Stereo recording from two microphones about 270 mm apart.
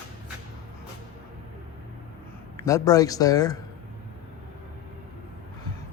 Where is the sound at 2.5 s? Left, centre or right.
Centre.